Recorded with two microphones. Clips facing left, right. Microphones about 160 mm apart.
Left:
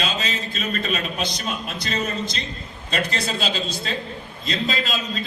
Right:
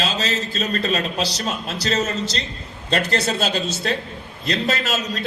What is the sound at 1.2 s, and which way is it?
Speech, 80° right.